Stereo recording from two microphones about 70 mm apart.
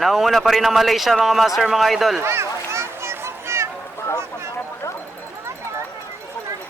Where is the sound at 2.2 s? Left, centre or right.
Right.